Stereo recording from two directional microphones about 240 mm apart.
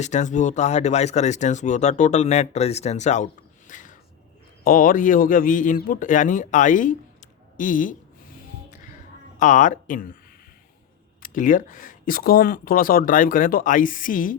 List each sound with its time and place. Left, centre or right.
0.0 s speech: left
3.7 s a sound: left
4.6 s speech: left
9.4 s speech: left
11.2 s speech: left